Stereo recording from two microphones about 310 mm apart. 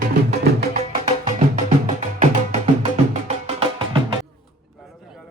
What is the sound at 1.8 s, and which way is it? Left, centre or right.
Music, right.